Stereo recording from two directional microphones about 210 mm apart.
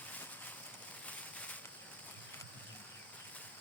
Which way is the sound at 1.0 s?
5° left (ahead or behind).